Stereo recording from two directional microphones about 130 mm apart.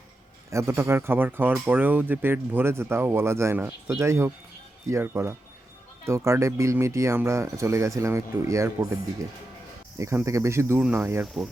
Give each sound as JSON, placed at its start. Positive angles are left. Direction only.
{"t": 0.5, "sound": "speech", "side_deg": -20}
{"t": 10.0, "sound": "speech", "side_deg": -25}